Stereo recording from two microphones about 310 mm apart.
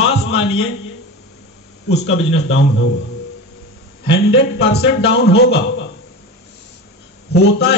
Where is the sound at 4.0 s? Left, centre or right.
Left.